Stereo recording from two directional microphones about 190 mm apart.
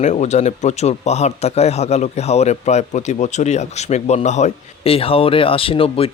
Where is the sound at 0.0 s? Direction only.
35° left (ahead or behind).